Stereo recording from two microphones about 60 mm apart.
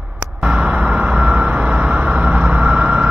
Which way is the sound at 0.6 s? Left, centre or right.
Centre.